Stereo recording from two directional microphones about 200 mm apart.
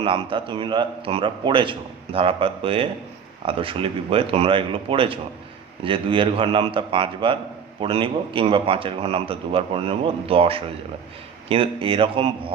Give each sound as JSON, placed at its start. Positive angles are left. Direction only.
{"t": 0.0, "sound": "a man's voice", "side_deg": -25}